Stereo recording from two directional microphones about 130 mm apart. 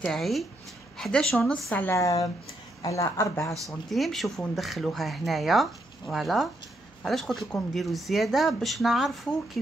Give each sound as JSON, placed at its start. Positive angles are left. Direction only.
{"t": 0.0, "sound": "speech", "side_deg": 0}
{"t": 1.9, "sound": "speech", "side_deg": 25}
{"t": 3.6, "sound": "speech", "side_deg": 0}